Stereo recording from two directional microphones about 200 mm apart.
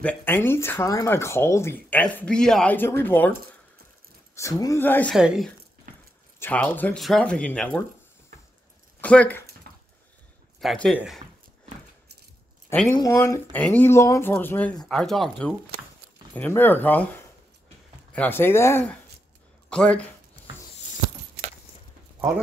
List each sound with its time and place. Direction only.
0.0 s speech: 10° left (ahead or behind)
4.4 s speech: 15° left (ahead or behind)
5.1 s speech: 5° right (ahead or behind)
6.4 s speech: 10° left (ahead or behind)
9.0 s speech: 5° left (ahead or behind)
9.6 s dog: 50° right (ahead or behind)
10.6 s speech: centre (ahead or behind)
12.8 s speech: 15° left (ahead or behind)
18.1 s speech: 10° left (ahead or behind)